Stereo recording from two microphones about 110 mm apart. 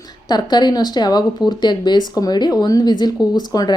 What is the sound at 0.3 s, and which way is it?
A woman's voice, 40° left (ahead or behind).